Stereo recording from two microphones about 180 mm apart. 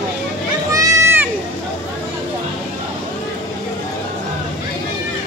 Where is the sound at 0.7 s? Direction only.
20° right (ahead or behind).